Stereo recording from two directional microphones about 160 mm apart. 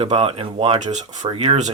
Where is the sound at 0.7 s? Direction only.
45° right (ahead or behind).